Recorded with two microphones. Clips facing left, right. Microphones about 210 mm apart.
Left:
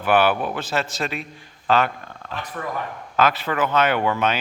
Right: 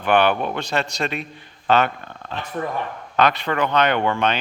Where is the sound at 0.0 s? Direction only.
5° left (ahead or behind).